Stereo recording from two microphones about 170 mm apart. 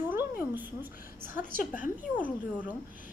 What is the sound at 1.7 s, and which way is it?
Speech, 50° left (ahead or behind).